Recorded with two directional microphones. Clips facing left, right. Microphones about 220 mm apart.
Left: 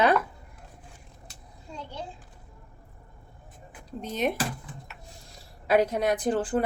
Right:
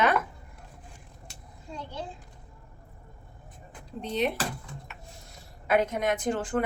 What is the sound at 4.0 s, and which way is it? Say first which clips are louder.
Speech: even; 45° left (ahead or behind).